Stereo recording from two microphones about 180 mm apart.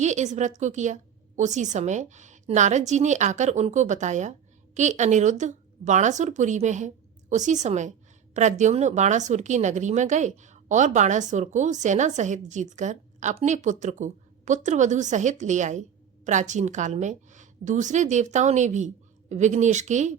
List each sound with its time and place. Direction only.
0.0 s a woman's voice: 40° right (ahead or behind)